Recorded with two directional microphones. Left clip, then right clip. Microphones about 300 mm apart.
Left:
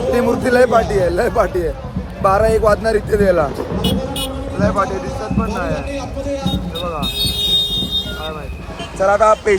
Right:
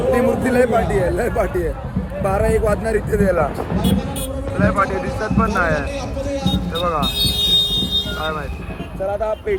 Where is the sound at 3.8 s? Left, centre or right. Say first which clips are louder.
Left 3 dB; centre.